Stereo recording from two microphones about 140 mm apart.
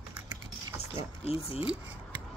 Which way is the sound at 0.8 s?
45° left (ahead or behind).